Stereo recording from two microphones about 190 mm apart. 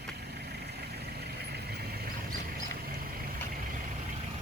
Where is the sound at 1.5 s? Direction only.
60° right (ahead or behind).